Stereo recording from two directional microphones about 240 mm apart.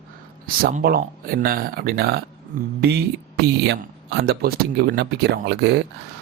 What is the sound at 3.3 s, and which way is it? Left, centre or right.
Speech, right.